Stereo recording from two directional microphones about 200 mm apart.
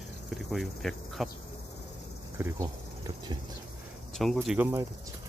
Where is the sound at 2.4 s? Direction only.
15° right (ahead or behind).